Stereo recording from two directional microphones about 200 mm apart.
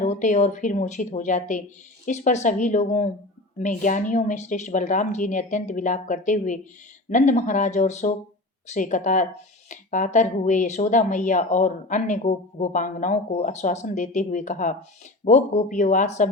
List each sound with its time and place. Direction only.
0.0 s speech: 40° left (ahead or behind)